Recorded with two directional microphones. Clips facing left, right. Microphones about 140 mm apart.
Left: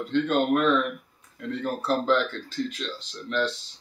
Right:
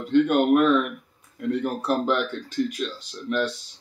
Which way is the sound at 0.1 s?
10° right (ahead or behind).